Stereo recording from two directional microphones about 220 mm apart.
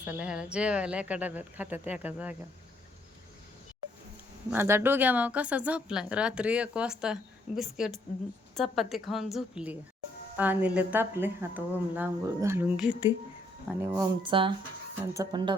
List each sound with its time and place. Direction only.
0.0 s speech: 5° right (ahead or behind)
4.5 s a woman's voice: 10° right (ahead or behind)